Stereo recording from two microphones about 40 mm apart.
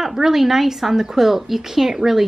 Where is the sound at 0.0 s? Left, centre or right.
Centre.